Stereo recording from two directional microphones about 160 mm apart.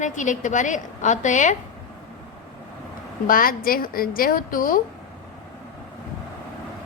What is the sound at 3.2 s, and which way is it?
A woman's voice, 60° left (ahead or behind).